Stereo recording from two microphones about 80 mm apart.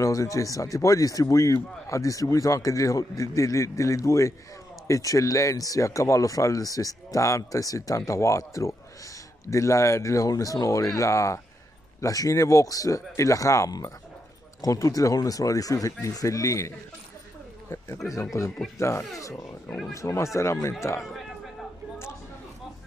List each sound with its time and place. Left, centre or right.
0.0 s speech: left